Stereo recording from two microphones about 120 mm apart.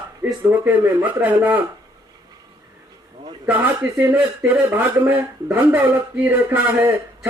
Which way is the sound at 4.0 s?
15° right (ahead or behind).